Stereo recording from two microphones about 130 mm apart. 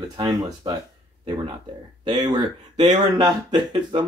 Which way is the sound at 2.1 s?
30° right (ahead or behind).